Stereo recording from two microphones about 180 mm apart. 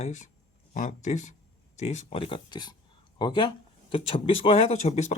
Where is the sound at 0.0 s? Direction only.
45° left (ahead or behind).